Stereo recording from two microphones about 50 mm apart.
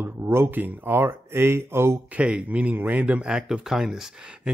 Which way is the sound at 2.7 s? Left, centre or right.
Right.